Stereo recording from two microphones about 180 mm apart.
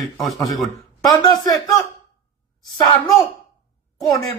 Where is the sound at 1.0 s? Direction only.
20° left (ahead or behind).